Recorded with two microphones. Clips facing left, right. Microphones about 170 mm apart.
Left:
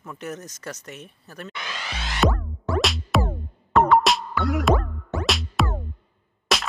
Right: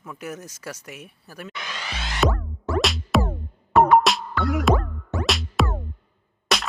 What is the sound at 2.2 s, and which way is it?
Music, centre (ahead or behind).